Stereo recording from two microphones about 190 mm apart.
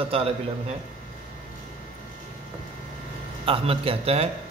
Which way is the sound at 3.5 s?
30° right (ahead or behind).